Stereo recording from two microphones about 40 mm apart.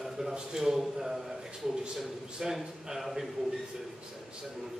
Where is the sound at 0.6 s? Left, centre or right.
Centre.